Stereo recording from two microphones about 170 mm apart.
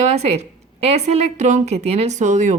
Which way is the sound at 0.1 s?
40° right (ahead or behind).